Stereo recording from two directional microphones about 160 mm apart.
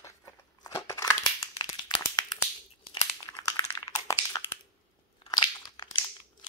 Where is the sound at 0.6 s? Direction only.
20° left (ahead or behind).